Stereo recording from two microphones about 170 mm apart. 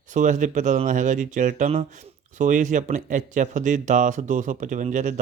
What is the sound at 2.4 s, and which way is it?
A man's voice, 50° right (ahead or behind).